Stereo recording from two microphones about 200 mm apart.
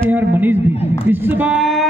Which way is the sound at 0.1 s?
10° right (ahead or behind).